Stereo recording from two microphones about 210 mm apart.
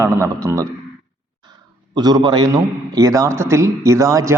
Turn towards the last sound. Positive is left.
turn(degrees=-15)  # may be behind; listen again after turning